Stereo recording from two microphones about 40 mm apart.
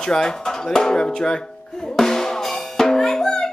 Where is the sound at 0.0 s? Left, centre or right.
Centre.